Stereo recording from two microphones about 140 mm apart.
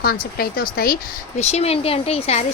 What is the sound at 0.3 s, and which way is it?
Speech, 90° left.